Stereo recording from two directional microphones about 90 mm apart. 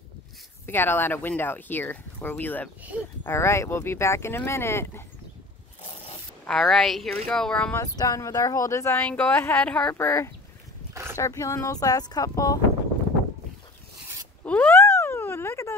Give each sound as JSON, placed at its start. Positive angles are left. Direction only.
{"t": 0.7, "sound": "speech", "side_deg": 25}
{"t": 6.5, "sound": "speech", "side_deg": 5}
{"t": 7.8, "sound": "speech", "side_deg": 45}
{"t": 9.9, "sound": "speech", "side_deg": 30}
{"t": 10.9, "sound": "a sound", "side_deg": -30}
{"t": 11.1, "sound": "speech", "side_deg": 35}
{"t": 14.4, "sound": "a sound", "side_deg": 20}